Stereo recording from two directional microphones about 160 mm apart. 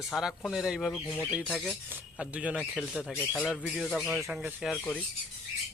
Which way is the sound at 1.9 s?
10° right (ahead or behind).